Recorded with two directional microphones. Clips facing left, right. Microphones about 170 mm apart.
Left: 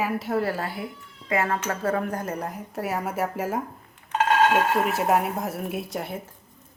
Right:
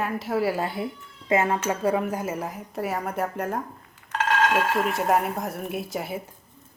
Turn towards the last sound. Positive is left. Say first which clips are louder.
# even
turn(degrees=0)  # may be behind; listen again after turning